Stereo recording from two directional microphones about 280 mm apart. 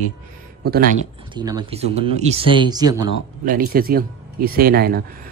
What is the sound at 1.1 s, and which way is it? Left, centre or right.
Speech, centre.